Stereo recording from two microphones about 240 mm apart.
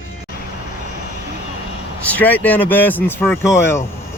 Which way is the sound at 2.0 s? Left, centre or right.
Centre.